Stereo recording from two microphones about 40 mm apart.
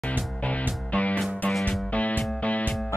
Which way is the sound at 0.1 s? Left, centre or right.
Left.